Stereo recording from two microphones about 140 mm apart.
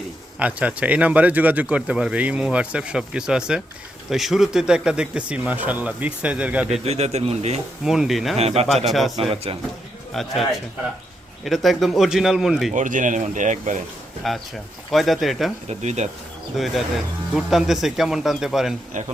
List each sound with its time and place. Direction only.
0.3 s speech: 10° right (ahead or behind)
6.8 s a man's voice: 50° right (ahead or behind)
7.9 s speech: centre (ahead or behind)
8.4 s a man's voice: 45° right (ahead or behind)
8.9 s speech: centre (ahead or behind)
9.3 s a man's voice: 40° right (ahead or behind)
10.1 s speech: centre (ahead or behind)
11.4 s speech: centre (ahead or behind)
12.7 s speech: 65° right (ahead or behind)
14.2 s speech: centre (ahead or behind)
15.7 s speech: 55° right (ahead or behind)
16.6 s speech: centre (ahead or behind)
18.9 s speech: 60° right (ahead or behind)